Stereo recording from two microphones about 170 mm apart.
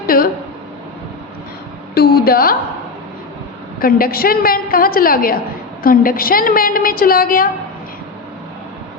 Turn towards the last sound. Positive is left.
turn(degrees=55)  # may be behind; listen again after turning